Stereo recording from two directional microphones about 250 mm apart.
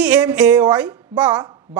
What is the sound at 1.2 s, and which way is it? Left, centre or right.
Speech, centre.